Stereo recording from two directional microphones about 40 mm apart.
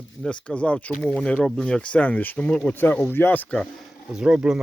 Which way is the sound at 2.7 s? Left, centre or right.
Left.